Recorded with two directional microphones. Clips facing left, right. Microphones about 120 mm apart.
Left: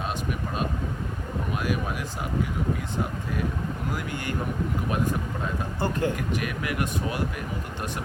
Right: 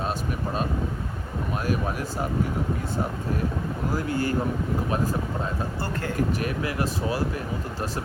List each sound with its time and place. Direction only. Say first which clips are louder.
3.9 s speech: right 6 dB; 35° right (ahead or behind)
5.8 s speech: left 8 dB; 15° left (ahead or behind)
6.1 s speech: right 4 dB; 35° right (ahead or behind)